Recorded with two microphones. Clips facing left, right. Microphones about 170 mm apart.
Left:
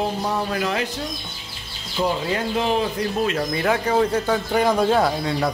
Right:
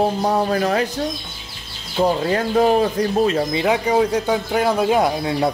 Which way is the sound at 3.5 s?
15° right (ahead or behind).